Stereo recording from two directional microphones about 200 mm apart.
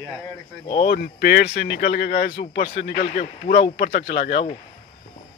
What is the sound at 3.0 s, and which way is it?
Speech, 30° left (ahead or behind).